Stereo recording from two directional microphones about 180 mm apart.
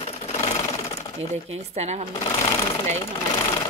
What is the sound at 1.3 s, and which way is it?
Speech, 40° right (ahead or behind).